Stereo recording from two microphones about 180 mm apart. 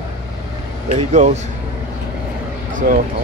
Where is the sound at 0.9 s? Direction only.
40° right (ahead or behind).